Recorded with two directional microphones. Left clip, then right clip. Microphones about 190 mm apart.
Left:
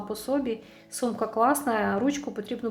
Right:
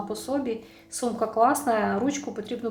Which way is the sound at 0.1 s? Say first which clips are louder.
Left 2 dB; 20° left (ahead or behind).